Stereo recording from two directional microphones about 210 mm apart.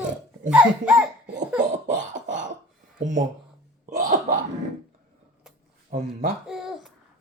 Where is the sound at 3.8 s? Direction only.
40° right (ahead or behind).